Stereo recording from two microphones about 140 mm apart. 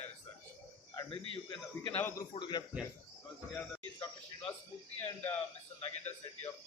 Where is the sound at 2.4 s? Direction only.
35° left (ahead or behind).